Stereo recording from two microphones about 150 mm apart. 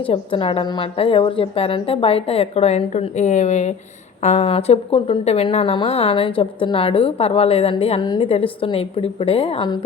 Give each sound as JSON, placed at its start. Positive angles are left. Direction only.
{"t": 0.0, "sound": "a woman's voice", "side_deg": 35}